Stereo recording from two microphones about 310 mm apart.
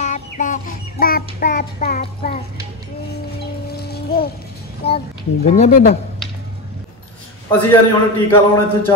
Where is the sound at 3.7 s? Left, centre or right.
Left.